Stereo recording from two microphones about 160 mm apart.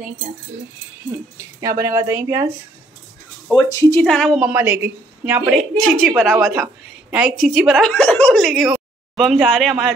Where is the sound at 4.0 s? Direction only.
5° left (ahead or behind).